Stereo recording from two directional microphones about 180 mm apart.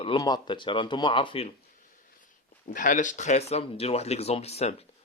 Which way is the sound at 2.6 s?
50° left (ahead or behind).